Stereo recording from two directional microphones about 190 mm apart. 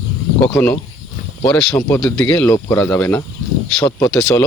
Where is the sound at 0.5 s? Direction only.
10° left (ahead or behind).